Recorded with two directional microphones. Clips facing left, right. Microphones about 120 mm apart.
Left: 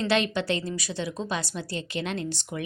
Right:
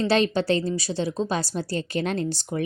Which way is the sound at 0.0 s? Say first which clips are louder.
Right 4 dB; 35° right (ahead or behind).